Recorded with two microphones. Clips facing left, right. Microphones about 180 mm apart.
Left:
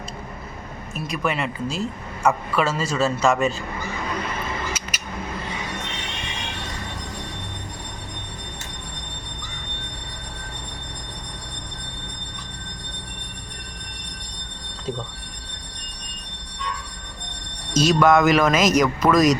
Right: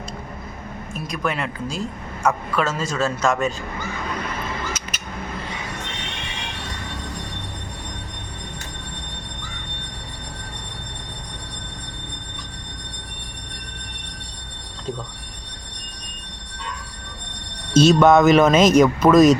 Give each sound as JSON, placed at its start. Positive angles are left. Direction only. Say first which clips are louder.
{"t": 0.9, "sound": "a woman's voice", "louder": "left 1 dB", "side_deg": 5}
{"t": 4.9, "sound": "a sound", "louder": "even", "side_deg": 10}
{"t": 17.7, "sound": "speech", "louder": "right 4 dB", "side_deg": -25}